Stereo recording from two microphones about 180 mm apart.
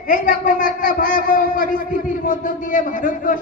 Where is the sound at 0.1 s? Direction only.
50° left (ahead or behind).